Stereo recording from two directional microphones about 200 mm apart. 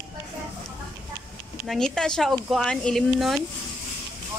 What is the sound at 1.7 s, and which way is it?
Speech, 5° left (ahead or behind).